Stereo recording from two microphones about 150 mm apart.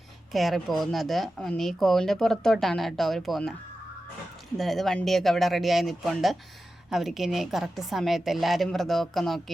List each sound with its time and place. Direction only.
0.3 s speech: centre (ahead or behind)
4.5 s speech: centre (ahead or behind)